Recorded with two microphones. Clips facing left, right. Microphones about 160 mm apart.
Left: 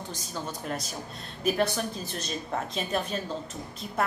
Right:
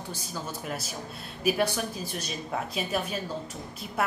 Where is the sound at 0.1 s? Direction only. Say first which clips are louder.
Even; 5° right (ahead or behind).